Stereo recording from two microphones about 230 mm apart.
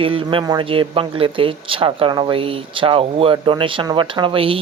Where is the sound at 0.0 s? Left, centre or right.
Right.